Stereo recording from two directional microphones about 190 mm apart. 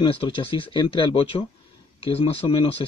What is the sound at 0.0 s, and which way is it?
Speech, 30° left (ahead or behind).